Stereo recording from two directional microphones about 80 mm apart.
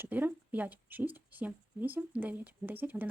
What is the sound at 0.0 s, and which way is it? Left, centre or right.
Speech, right.